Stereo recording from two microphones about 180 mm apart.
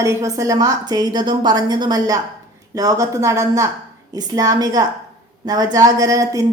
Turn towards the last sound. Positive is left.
turn(degrees=-20)  # may be behind; listen again after turning